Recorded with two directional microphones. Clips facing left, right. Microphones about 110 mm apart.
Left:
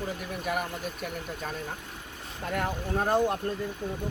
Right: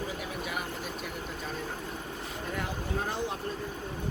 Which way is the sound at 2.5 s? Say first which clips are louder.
Left 5 dB; 50° left (ahead or behind).